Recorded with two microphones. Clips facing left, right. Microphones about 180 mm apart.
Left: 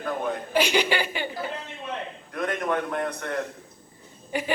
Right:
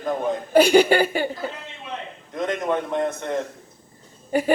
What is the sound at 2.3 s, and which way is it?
A man's voice, 25° right (ahead or behind).